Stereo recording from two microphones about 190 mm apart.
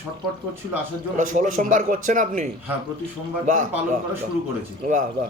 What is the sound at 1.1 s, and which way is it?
A man's voice, 40° right (ahead or behind).